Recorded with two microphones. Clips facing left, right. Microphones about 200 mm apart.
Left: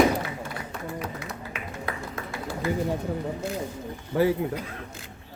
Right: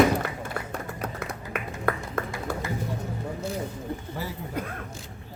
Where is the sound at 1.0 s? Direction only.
55° right (ahead or behind).